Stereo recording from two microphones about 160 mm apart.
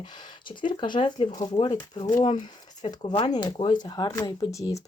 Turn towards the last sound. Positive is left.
turn(degrees=20)  # may be behind; listen again after turning